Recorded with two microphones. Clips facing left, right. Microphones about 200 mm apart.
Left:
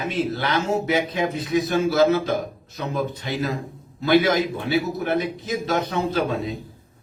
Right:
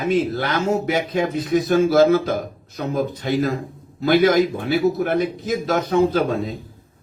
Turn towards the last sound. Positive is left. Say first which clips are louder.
# right 5 dB
turn(degrees=-50)  # may be behind; listen again after turning